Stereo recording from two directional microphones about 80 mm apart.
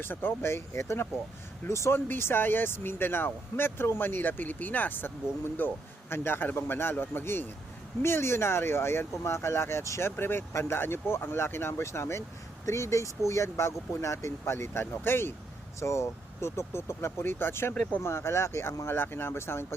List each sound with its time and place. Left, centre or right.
0.0 s speech: left